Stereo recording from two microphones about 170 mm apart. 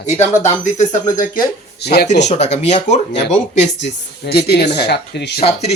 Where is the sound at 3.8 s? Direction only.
70° left (ahead or behind).